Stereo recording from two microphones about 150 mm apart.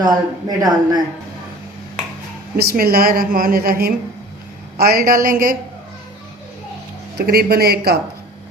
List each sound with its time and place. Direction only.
0.0 s speech: 25° right (ahead or behind)
2.6 s a woman's voice: 90° right; by 5.5 s 70° right (ahead or behind)
7.2 s a man's voice: 90° right